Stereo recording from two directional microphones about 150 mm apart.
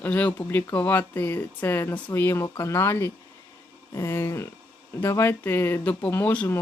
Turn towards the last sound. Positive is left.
turn(degrees=10)  # may be behind; listen again after turning